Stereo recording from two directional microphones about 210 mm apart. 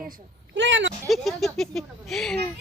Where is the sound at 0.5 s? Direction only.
60° right (ahead or behind).